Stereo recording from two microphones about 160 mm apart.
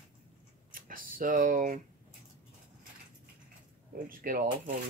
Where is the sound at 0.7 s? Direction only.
60° right (ahead or behind).